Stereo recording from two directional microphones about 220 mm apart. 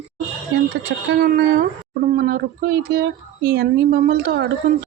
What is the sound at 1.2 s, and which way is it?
Speech, 45° right (ahead or behind).